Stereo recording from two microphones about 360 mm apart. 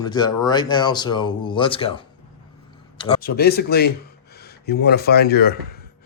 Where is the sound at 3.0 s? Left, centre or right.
Centre.